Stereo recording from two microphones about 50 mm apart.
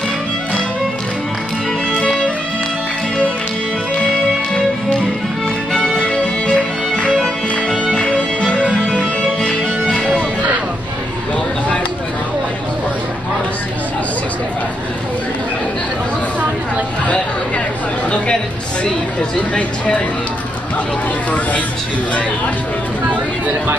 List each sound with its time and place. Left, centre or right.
1.9 s music: centre
5.9 s music: centre